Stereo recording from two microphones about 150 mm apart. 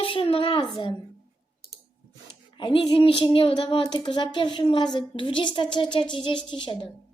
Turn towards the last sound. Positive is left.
turn(degrees=30)  # may be behind; listen again after turning